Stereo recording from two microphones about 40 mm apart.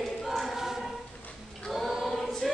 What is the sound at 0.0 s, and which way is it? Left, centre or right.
Choir, centre.